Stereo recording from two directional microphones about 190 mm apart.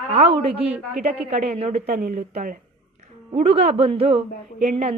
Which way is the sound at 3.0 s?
35° right (ahead or behind).